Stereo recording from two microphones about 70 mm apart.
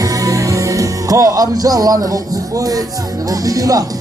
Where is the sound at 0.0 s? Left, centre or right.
Right.